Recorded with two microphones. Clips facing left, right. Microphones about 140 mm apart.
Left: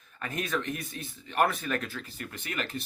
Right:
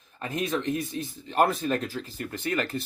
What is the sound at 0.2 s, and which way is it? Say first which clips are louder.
Speech: right 3 dB; 25° right (ahead or behind).